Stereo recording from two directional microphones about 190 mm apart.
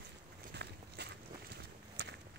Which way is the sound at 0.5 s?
60° right (ahead or behind).